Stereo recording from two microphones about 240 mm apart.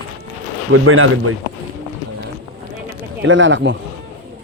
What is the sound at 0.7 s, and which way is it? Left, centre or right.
Speech, right.